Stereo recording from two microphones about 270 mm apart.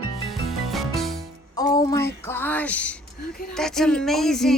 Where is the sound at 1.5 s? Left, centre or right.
Centre.